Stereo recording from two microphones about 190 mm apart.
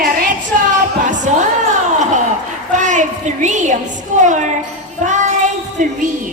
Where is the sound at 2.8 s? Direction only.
40° right (ahead or behind).